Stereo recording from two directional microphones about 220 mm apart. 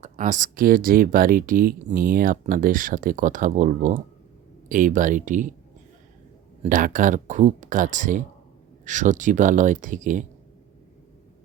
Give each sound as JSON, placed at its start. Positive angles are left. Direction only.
{"t": 0.0, "sound": "speech", "side_deg": -35}
{"t": 6.6, "sound": "speech", "side_deg": -35}